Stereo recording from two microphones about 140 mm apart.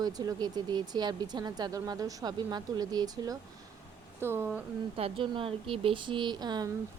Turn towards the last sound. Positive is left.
turn(degrees=-30)  # may be behind; listen again after turning